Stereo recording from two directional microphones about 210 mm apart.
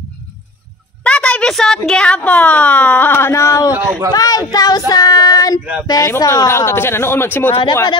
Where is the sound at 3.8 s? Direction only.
10° right (ahead or behind).